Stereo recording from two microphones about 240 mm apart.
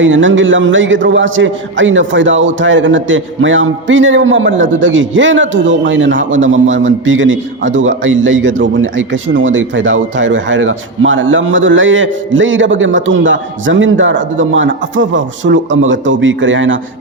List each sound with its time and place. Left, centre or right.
0.0 s a man's voice: right